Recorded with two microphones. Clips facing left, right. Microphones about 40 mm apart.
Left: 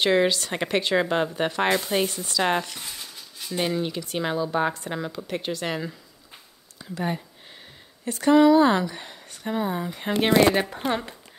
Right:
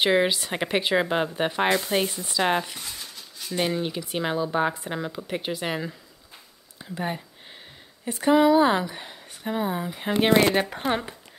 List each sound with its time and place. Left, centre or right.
0.0 s speech: centre
6.8 s a sound: right
8.0 s speech: centre
10.3 s speech: centre